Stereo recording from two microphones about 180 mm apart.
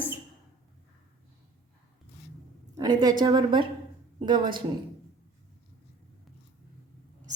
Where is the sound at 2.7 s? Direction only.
20° right (ahead or behind).